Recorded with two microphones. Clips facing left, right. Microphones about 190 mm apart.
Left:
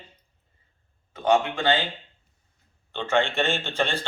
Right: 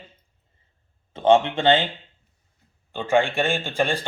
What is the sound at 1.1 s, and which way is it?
Speech, 25° right (ahead or behind).